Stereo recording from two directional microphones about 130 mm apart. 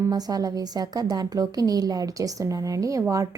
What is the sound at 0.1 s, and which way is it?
A woman's voice, 30° right (ahead or behind).